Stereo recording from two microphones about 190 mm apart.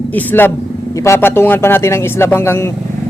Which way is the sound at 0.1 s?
10° left (ahead or behind).